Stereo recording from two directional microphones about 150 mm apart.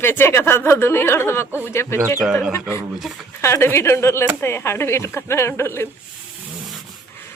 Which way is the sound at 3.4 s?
15° left (ahead or behind).